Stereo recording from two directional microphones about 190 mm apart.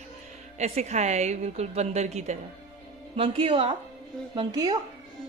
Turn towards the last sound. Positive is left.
turn(degrees=-25)  # may be behind; listen again after turning